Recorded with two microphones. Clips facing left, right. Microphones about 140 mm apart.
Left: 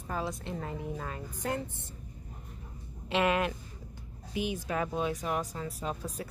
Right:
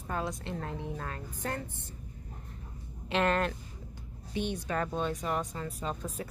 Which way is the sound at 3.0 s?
5° left (ahead or behind).